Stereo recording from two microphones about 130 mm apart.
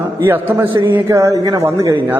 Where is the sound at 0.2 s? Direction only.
15° right (ahead or behind).